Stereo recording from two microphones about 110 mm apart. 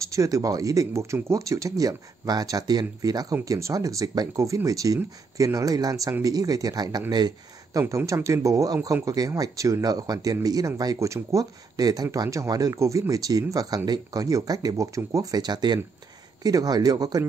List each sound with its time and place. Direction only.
0.1 s speech: 30° right (ahead or behind)
7.9 s speech: 30° right (ahead or behind)